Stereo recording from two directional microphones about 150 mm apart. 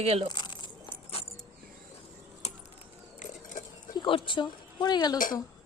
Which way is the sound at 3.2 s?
55° left (ahead or behind).